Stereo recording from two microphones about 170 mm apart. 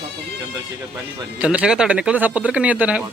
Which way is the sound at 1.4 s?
5° right (ahead or behind).